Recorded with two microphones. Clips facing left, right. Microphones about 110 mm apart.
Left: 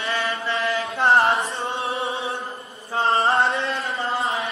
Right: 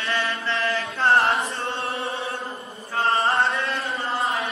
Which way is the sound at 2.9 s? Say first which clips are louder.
Left 2 dB; 30° left (ahead or behind).